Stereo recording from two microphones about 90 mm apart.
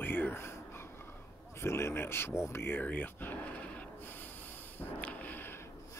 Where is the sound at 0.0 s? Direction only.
25° left (ahead or behind).